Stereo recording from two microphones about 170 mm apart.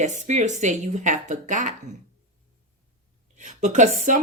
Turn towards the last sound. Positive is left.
turn(degrees=-45)  # may be behind; listen again after turning